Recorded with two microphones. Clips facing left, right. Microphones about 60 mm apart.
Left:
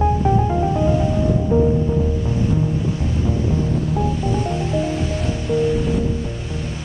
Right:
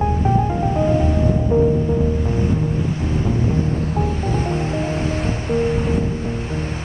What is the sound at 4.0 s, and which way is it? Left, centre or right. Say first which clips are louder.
Music: left 1 dB; right.